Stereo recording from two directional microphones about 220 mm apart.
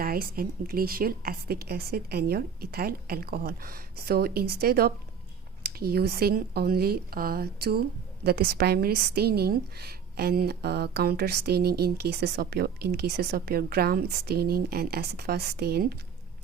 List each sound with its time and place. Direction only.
0.0 s speech: 40° right (ahead or behind)